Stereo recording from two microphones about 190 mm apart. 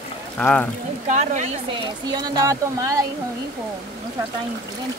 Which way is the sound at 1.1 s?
40° right (ahead or behind).